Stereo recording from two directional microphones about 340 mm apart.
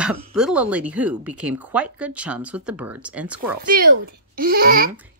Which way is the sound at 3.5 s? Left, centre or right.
Right.